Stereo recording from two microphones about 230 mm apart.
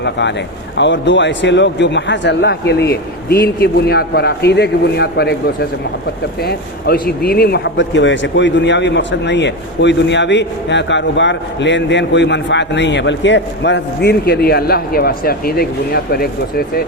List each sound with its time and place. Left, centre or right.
0.0 s speech: left
6.4 s speech: left